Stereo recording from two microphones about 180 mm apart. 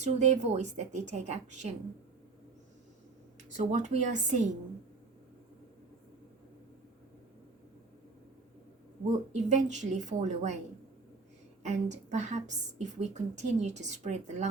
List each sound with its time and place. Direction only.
0.0 s a woman's voice: 40° right (ahead or behind)
3.6 s speech: 45° right (ahead or behind)
9.3 s a woman's voice: 40° right (ahead or behind)
11.6 s a woman's voice: 40° right (ahead or behind)